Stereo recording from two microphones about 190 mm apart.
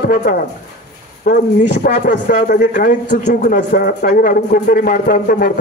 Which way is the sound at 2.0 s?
50° left (ahead or behind).